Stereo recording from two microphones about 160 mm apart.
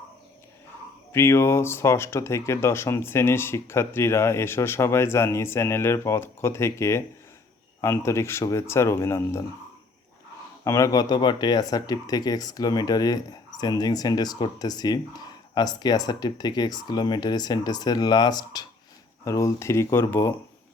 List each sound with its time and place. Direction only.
1.1 s speech: 15° left (ahead or behind)
10.6 s speech: 20° left (ahead or behind)